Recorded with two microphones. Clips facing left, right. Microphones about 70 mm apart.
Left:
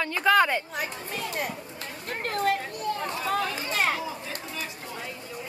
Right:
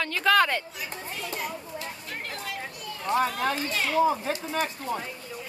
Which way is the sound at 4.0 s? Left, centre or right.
Right.